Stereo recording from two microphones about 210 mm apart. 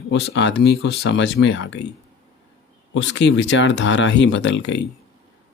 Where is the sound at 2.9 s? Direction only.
60° left (ahead or behind).